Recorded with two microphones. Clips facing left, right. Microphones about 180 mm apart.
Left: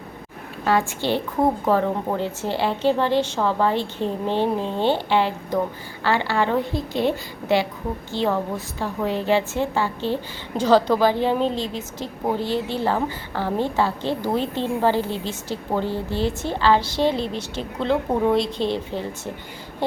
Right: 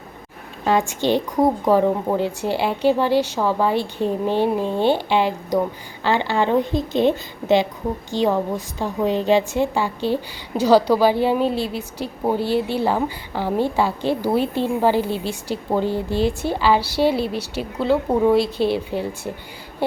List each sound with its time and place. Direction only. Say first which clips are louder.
0.6 s a woman's voice: right 2 dB; 20° right (ahead or behind)